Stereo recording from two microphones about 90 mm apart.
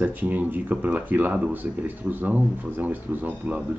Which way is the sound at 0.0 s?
20° right (ahead or behind).